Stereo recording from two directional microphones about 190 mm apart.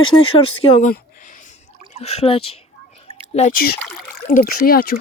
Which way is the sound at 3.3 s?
45° left (ahead or behind).